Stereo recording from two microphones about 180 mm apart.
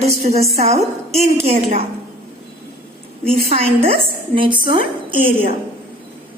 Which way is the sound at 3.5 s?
35° right (ahead or behind).